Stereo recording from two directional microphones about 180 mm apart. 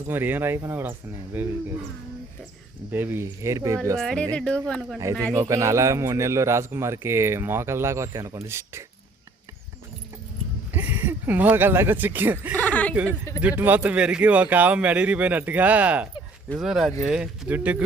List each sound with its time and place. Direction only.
0.1 s speech: 10° right (ahead or behind)
2.9 s speech: 10° right (ahead or behind)
3.9 s speech: 5° left (ahead or behind)
5.3 s speech: 15° right (ahead or behind)
10.7 s speech: 10° right (ahead or behind)
12.5 s speech: 10° left (ahead or behind)
13.4 s speech: 10° right (ahead or behind)